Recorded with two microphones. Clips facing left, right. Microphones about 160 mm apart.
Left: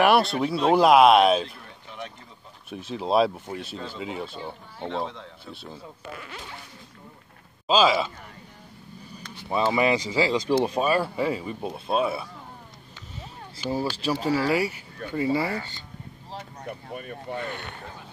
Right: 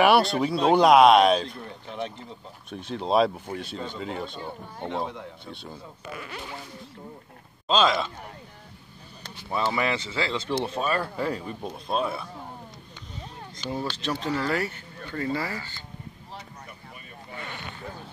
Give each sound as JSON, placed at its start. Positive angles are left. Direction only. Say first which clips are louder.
{"t": 0.0, "sound": "speech", "louder": "even", "side_deg": 0}
{"t": 1.9, "sound": "speech", "louder": "right 5 dB", "side_deg": -30}
{"t": 2.7, "sound": "speech", "louder": "even", "side_deg": 5}
{"t": 4.8, "sound": "speech", "louder": "even", "side_deg": -15}
{"t": 5.4, "sound": "speech", "louder": "even", "side_deg": 5}
{"t": 7.6, "sound": "speech", "louder": "left 2 dB", "side_deg": 5}
{"t": 9.5, "sound": "speech", "louder": "left 4 dB", "side_deg": 20}
{"t": 13.6, "sound": "speech", "louder": "left 4 dB", "side_deg": 5}
{"t": 16.3, "sound": "speech", "louder": "left 6 dB", "side_deg": 55}